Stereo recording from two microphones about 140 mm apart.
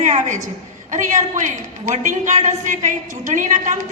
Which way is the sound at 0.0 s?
60° right (ahead or behind).